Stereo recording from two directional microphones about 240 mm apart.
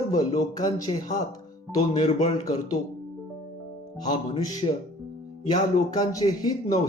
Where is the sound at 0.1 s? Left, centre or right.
Centre.